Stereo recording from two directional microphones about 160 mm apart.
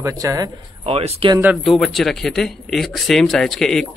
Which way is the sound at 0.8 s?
35° right (ahead or behind).